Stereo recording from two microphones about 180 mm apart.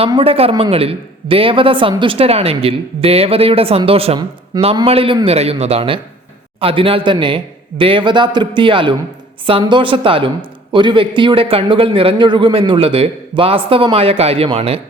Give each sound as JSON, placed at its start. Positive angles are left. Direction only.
{"t": 0.1, "sound": "a woman's voice", "side_deg": -30}